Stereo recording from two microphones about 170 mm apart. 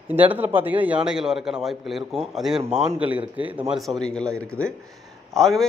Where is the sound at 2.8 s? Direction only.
40° right (ahead or behind).